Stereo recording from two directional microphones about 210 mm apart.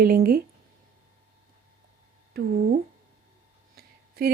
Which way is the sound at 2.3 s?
45° right (ahead or behind).